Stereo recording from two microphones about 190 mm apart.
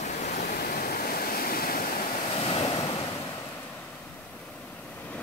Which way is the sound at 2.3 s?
30° left (ahead or behind).